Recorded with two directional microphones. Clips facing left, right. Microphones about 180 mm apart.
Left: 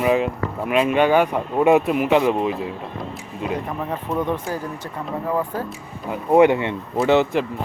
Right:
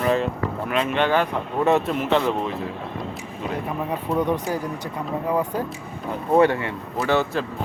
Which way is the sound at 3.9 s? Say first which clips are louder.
Right 1 dB; 15° right (ahead or behind).